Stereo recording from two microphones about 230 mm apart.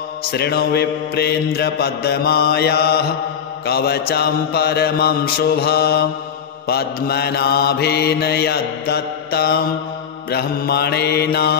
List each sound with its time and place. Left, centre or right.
0.3 s mantra: left